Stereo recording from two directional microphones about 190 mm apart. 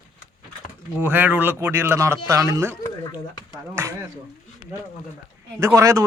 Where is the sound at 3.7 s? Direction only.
15° right (ahead or behind).